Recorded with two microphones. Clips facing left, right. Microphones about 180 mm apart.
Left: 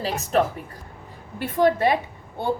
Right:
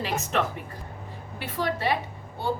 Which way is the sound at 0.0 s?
40° left (ahead or behind).